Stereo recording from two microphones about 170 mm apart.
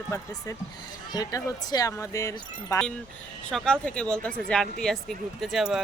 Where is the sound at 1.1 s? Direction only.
20° left (ahead or behind).